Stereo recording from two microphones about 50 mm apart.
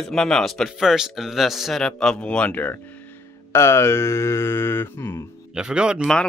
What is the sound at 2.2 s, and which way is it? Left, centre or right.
Speech, left.